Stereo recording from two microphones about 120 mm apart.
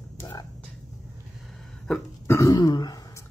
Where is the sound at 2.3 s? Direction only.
25° left (ahead or behind).